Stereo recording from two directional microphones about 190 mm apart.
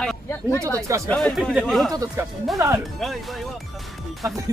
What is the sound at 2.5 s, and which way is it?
Speech, 20° right (ahead or behind).